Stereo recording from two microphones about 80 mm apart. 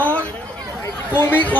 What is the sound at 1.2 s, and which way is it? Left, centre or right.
Speech, left.